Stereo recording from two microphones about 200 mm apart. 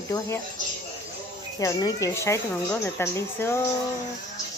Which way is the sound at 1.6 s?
15° left (ahead or behind).